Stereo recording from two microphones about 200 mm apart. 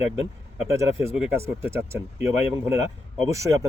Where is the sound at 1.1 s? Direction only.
10° right (ahead or behind).